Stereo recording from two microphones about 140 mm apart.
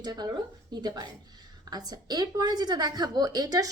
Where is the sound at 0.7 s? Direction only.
30° right (ahead or behind).